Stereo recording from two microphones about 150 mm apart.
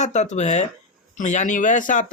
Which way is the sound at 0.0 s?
50° left (ahead or behind).